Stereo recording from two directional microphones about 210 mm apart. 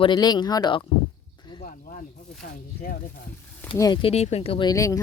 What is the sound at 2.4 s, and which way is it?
Speech, 45° left (ahead or behind).